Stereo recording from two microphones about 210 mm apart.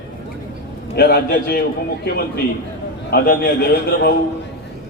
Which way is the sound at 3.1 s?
50° left (ahead or behind).